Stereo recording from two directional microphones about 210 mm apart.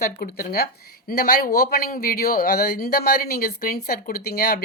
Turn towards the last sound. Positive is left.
turn(degrees=45)  # may be behind; listen again after turning